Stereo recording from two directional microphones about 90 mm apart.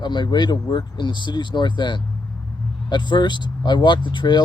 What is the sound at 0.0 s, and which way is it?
Speech, 55° left (ahead or behind).